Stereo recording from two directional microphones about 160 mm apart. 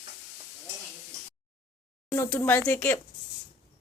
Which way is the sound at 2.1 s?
15° left (ahead or behind).